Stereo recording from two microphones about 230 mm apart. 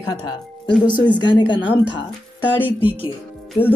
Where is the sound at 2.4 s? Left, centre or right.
Centre.